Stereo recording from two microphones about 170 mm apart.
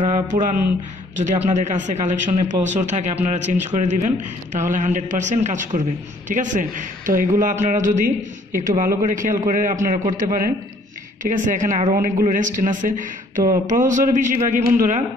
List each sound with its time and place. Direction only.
0.1 s a man's voice: 50° right (ahead or behind)